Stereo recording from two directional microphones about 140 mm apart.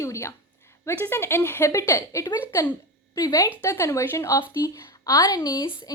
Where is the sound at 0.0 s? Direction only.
20° left (ahead or behind).